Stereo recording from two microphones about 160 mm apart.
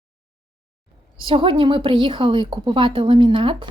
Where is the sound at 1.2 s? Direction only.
30° right (ahead or behind).